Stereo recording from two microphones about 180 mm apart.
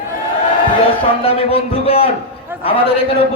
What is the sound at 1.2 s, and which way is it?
Speech, 30° left (ahead or behind).